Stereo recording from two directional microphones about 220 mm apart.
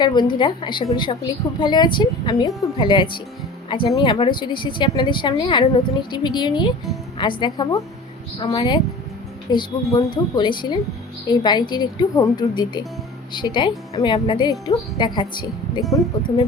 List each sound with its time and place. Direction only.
0.0 s a woman's voice: 20° left (ahead or behind)
15.8 s speech: centre (ahead or behind)